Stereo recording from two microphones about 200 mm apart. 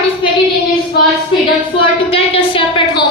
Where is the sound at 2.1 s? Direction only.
25° left (ahead or behind).